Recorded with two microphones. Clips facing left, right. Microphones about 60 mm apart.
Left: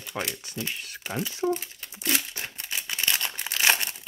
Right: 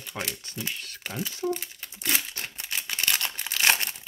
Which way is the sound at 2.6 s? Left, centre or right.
Centre.